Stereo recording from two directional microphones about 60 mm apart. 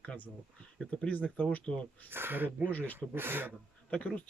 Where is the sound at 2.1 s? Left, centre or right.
Right.